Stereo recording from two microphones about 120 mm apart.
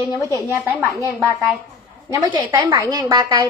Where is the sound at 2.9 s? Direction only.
35° right (ahead or behind).